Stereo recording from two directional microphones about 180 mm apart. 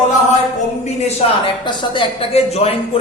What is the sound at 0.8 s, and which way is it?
Speech, 35° left (ahead or behind).